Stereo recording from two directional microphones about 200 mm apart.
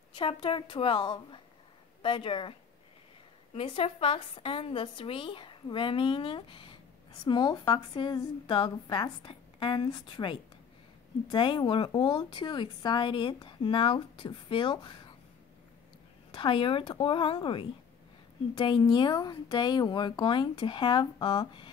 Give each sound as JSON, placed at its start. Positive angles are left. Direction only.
{"t": 0.1, "sound": "a woman's voice", "side_deg": 25}
{"t": 3.5, "sound": "a woman's voice", "side_deg": 30}
{"t": 16.3, "sound": "a woman's voice", "side_deg": 25}